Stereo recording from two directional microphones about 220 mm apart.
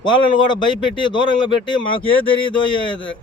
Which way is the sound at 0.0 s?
20° left (ahead or behind).